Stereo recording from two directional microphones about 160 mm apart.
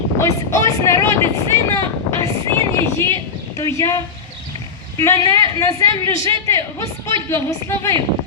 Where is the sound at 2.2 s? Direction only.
30° right (ahead or behind).